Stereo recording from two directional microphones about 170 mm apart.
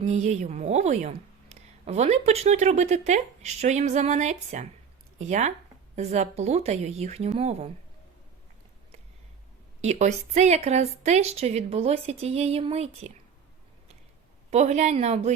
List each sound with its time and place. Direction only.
0.0 s a woman's voice: 40° right (ahead or behind)
9.8 s a woman's voice: 40° right (ahead or behind)
14.5 s a woman's voice: 40° right (ahead or behind)